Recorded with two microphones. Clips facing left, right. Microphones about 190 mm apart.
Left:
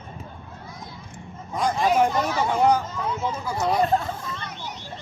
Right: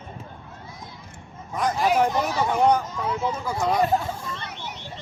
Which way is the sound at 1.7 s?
Centre (ahead or behind).